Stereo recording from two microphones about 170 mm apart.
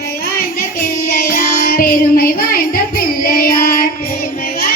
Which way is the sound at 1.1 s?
55° left (ahead or behind).